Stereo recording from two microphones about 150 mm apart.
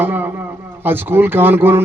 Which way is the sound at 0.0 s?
15° right (ahead or behind).